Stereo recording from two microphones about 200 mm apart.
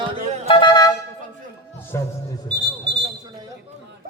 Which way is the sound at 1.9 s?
15° left (ahead or behind).